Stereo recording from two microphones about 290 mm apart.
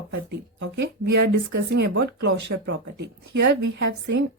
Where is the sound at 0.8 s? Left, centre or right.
Right.